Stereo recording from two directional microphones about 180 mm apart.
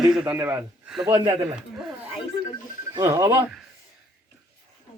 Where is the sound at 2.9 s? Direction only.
15° right (ahead or behind).